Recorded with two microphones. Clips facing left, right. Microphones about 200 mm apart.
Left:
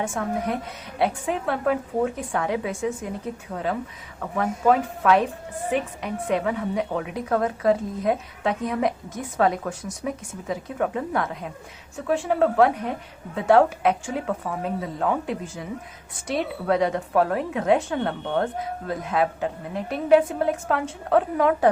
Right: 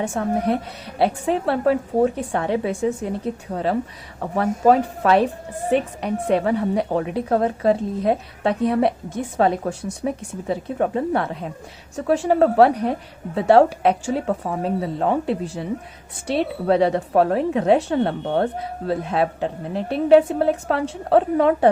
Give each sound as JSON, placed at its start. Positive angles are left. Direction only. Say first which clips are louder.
{"t": 0.0, "sound": "a woman's voice", "louder": "right 4 dB", "side_deg": -35}